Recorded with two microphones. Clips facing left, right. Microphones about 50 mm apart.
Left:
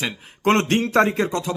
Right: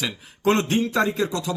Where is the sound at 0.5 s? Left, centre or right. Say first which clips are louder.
Left 3 dB; left.